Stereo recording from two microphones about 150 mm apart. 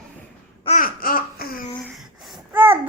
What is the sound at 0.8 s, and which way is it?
Babbling, 70° left (ahead or behind).